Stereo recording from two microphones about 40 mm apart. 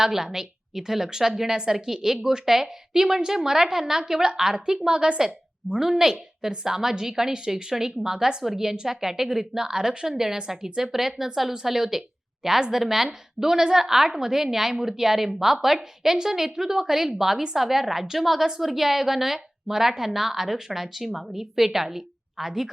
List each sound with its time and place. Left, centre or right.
0.0 s a woman's voice: centre